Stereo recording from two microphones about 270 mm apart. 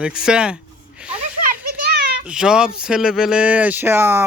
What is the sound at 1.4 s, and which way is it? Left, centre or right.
Children playing, right.